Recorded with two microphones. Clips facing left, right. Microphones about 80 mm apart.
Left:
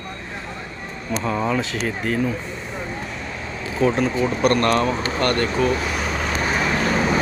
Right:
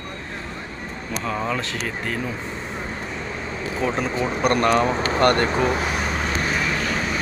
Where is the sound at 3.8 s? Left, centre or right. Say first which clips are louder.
Left 5 dB; centre.